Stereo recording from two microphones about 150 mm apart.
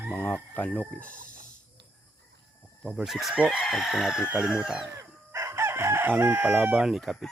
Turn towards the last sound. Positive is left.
turn(degrees=0)  # may be behind; listen again after turning